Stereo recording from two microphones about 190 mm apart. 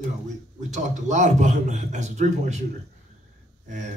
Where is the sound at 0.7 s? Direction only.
40° right (ahead or behind).